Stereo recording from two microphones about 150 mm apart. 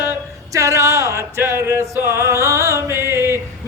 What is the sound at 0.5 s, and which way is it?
Speech, 20° right (ahead or behind).